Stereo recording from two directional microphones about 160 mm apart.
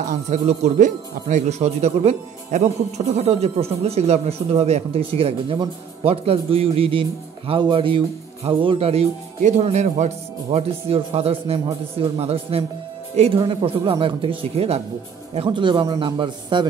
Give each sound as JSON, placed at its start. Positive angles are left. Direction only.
{"t": 0.1, "sound": "speech", "side_deg": -50}